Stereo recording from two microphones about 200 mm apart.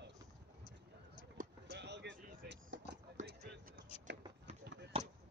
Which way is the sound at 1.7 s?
60° right (ahead or behind).